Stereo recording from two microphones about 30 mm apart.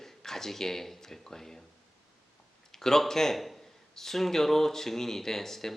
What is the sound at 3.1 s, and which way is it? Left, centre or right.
Speech, centre.